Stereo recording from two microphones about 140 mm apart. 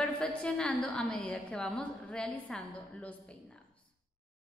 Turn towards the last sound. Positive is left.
turn(degrees=5)  # may be behind; listen again after turning